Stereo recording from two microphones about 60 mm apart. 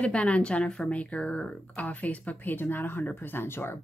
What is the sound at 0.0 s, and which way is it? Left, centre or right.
A woman's voice, centre.